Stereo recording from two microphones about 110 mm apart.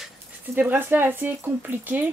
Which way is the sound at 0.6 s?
20° right (ahead or behind).